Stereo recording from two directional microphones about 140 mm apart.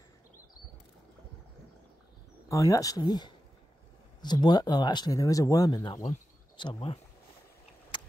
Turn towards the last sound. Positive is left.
turn(degrees=40)  # may be behind; listen again after turning